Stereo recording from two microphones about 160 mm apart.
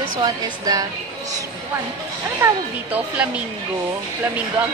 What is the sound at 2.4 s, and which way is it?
Speech, 10° right (ahead or behind).